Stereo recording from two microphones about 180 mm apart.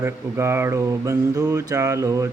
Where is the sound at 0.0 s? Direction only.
15° right (ahead or behind).